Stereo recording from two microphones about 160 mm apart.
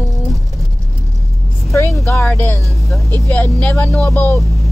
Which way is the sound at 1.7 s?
15° left (ahead or behind).